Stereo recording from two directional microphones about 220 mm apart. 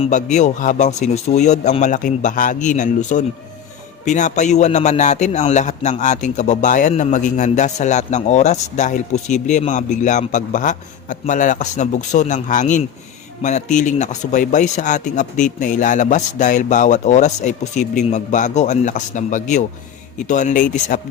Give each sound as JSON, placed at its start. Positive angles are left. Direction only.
{"t": 0.0, "sound": "a man's voice", "side_deg": 35}